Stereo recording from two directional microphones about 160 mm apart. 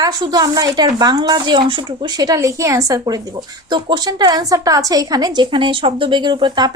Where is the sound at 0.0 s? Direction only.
25° right (ahead or behind).